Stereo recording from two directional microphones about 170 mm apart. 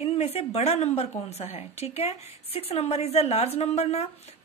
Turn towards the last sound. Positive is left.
turn(degrees=40)  # may be behind; listen again after turning